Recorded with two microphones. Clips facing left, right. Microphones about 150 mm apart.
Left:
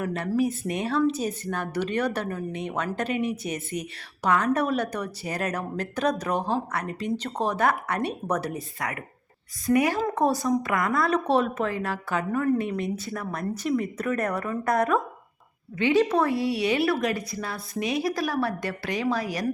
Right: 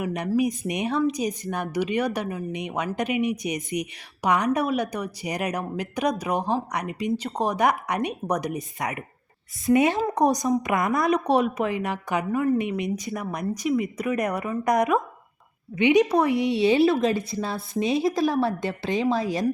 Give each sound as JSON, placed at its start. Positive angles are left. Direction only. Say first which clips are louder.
{"t": 0.0, "sound": "a woman's voice", "louder": "right 1 dB", "side_deg": -15}